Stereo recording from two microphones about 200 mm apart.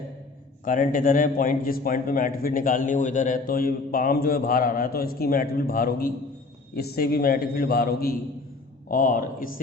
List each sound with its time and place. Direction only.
0.6 s a man's voice: 40° left (ahead or behind)